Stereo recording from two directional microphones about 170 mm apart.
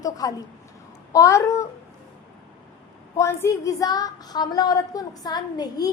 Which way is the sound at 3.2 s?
20° left (ahead or behind).